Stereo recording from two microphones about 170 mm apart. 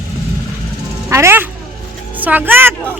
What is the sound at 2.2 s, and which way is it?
Speech, 10° right (ahead or behind).